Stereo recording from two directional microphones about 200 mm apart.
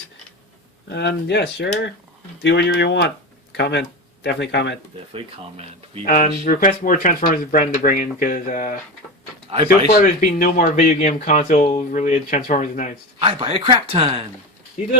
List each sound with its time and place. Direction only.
0.9 s speech: 60° left (ahead or behind)
6.1 s speech: 45° left (ahead or behind)
13.1 s speech: 25° right (ahead or behind)